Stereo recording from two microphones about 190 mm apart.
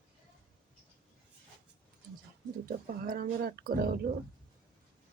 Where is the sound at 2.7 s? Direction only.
50° right (ahead or behind).